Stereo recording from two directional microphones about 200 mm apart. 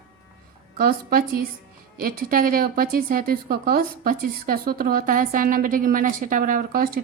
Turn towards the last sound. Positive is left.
turn(degrees=-45)  # may be behind; listen again after turning